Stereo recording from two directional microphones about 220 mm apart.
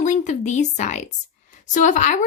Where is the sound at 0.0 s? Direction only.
35° left (ahead or behind).